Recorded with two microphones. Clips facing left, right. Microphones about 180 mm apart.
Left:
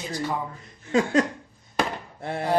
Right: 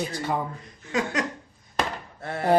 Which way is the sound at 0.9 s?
30° left (ahead or behind).